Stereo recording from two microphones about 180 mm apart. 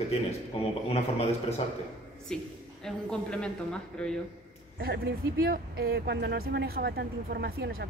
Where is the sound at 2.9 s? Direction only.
5° left (ahead or behind).